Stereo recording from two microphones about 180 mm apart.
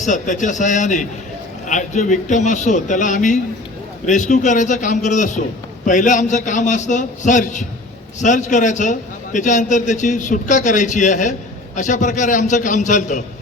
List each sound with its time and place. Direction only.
0.0 s a man's voice: 45° left (ahead or behind)